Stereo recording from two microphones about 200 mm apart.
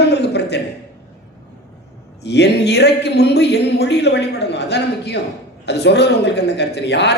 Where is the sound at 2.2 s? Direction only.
55° left (ahead or behind).